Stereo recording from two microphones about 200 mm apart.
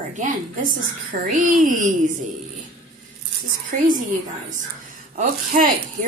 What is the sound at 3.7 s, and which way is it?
Speech, 40° right (ahead or behind).